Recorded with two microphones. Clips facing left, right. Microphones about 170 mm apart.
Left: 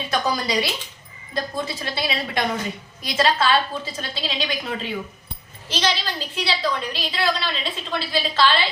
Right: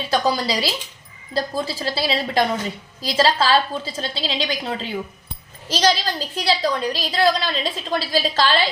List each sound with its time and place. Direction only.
0.1 s a woman's voice: 30° right (ahead or behind)